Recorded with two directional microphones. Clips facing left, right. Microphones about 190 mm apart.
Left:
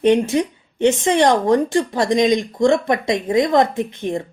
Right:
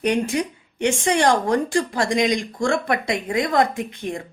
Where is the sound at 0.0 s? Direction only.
25° left (ahead or behind).